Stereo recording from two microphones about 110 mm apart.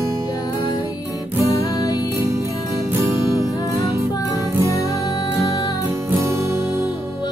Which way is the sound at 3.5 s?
35° left (ahead or behind).